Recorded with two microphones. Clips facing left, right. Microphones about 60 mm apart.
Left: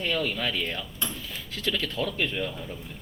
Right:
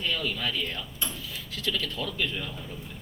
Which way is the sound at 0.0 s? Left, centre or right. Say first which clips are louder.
Left 2 dB; left.